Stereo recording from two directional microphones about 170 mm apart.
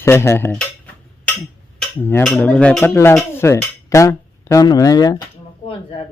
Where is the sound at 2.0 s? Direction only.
10° left (ahead or behind).